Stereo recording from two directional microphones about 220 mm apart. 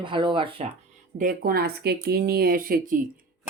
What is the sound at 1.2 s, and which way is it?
Speech, 40° right (ahead or behind).